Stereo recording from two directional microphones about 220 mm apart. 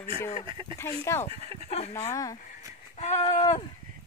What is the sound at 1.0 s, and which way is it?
Speech, 10° left (ahead or behind).